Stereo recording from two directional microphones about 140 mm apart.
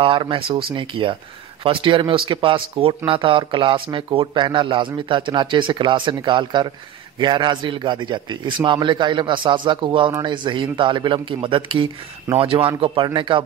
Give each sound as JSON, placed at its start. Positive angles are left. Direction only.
{"t": 0.0, "sound": "a man's voice", "side_deg": -35}